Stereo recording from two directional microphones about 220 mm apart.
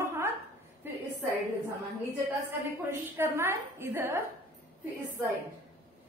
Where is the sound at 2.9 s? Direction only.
10° right (ahead or behind).